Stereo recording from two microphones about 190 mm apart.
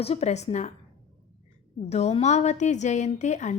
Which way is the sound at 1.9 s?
35° left (ahead or behind).